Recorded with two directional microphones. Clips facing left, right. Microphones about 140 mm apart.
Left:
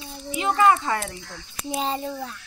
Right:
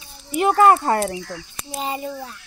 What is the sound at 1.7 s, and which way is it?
Speech, 10° right (ahead or behind).